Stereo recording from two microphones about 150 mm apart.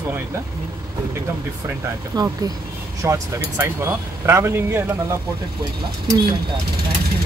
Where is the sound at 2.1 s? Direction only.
25° right (ahead or behind).